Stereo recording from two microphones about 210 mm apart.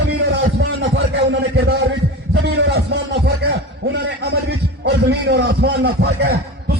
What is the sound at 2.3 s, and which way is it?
A man's voice, 55° right (ahead or behind).